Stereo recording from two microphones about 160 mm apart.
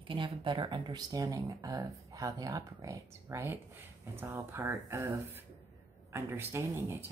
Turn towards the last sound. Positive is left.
turn(degrees=-15)  # may be behind; listen again after turning